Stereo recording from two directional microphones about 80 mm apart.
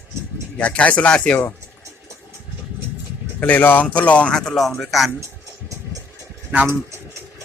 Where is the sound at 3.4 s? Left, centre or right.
Left; by 5.1 s centre.